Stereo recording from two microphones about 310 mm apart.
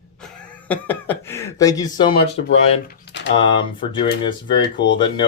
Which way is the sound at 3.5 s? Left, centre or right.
Centre.